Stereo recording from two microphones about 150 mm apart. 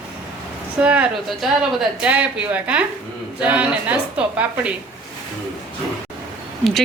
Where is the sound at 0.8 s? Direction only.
10° right (ahead or behind).